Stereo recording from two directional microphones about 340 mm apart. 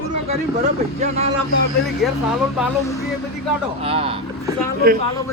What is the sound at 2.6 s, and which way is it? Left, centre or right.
Speech, centre.